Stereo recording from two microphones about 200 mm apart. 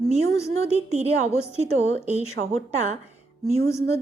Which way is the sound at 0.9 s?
35° right (ahead or behind).